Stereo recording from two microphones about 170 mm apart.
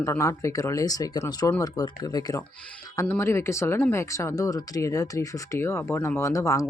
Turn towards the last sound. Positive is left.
turn(degrees=20)  # may be behind; listen again after turning